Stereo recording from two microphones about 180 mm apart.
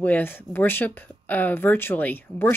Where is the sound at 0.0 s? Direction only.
10° left (ahead or behind).